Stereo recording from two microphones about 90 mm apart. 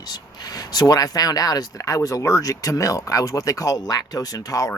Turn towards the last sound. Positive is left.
turn(degrees=40)  # may be behind; listen again after turning